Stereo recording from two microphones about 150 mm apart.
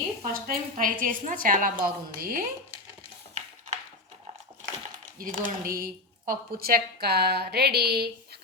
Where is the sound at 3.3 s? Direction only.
50° right (ahead or behind).